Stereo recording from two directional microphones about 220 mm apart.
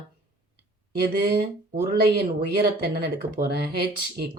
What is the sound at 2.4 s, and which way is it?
Speech, 45° right (ahead or behind).